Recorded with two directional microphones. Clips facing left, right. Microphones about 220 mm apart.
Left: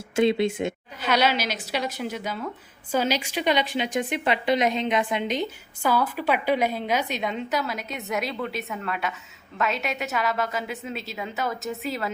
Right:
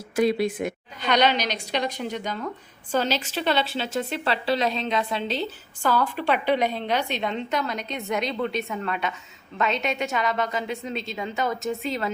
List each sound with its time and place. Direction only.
0.2 s speech: 25° left (ahead or behind)
1.0 s a woman's voice: 5° left (ahead or behind)